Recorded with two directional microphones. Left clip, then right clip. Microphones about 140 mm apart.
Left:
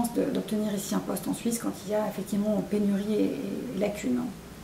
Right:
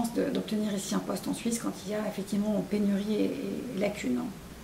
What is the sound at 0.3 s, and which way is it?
Speech, 5° left (ahead or behind).